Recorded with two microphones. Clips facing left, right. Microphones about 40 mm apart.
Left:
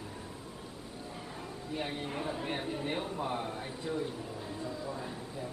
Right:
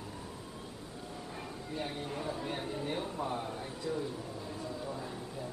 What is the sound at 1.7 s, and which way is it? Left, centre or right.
Speech, left.